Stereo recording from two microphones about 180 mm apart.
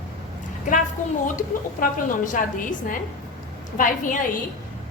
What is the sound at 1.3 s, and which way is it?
A woman's voice, 45° left (ahead or behind).